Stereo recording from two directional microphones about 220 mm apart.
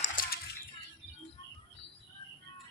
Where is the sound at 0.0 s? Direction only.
50° left (ahead or behind).